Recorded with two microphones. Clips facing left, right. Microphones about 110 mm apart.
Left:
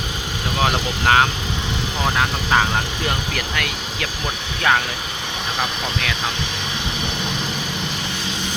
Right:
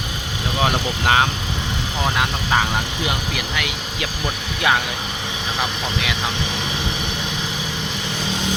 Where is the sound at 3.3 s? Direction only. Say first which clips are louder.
Even; 10° right (ahead or behind).